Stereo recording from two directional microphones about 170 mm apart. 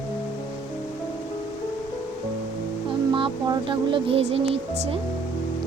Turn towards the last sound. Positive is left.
turn(degrees=-35)  # may be behind; listen again after turning